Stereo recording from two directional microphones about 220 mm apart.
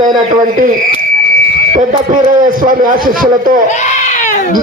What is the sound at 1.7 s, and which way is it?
Buzzer, 35° right (ahead or behind).